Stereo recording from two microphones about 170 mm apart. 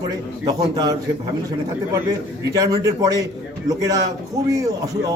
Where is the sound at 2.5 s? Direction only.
20° right (ahead or behind).